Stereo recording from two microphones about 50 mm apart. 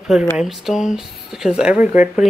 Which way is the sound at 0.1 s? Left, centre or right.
Centre.